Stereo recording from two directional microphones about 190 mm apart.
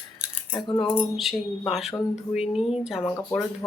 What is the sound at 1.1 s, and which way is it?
Speech, centre (ahead or behind).